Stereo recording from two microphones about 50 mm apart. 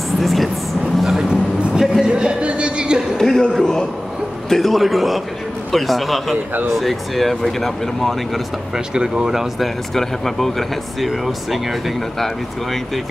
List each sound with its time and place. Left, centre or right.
0.2 s speech: centre
1.0 s a sound: centre
3.2 s a man's voice: centre
6.3 s speech: right
6.8 s speech: centre
8.7 s speech: centre
9.9 s speech: centre